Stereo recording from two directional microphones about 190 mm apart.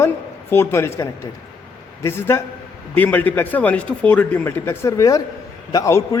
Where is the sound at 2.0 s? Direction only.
15° left (ahead or behind).